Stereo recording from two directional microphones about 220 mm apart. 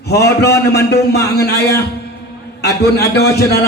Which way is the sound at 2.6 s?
50° left (ahead or behind).